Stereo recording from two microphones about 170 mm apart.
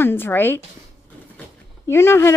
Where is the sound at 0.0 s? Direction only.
10° left (ahead or behind).